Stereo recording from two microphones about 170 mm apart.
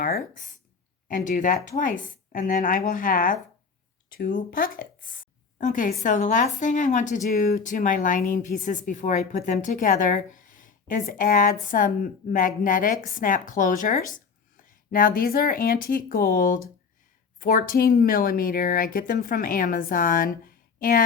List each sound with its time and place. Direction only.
0.0 s a woman's voice: 55° left (ahead or behind)